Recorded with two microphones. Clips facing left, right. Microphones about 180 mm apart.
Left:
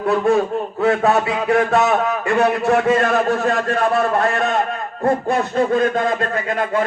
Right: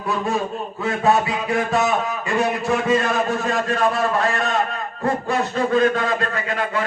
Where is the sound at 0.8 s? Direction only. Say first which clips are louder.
Left 3 dB; 65° left (ahead or behind).